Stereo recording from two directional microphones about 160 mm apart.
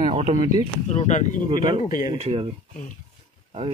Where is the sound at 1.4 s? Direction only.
30° right (ahead or behind).